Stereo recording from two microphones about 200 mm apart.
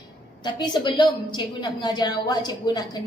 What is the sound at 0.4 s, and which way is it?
A woman's voice, 20° left (ahead or behind).